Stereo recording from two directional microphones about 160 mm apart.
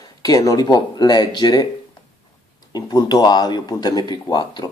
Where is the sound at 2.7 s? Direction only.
25° left (ahead or behind).